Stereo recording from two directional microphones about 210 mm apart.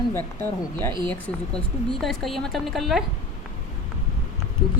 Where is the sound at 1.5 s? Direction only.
Centre (ahead or behind).